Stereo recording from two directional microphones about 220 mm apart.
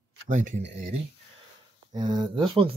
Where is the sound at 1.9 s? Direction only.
20° right (ahead or behind).